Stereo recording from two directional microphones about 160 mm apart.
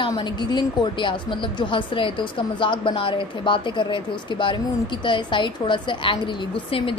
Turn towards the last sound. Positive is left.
turn(degrees=30)  # may be behind; listen again after turning